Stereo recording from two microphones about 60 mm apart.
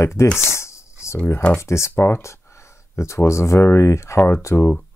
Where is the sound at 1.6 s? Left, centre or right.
Left.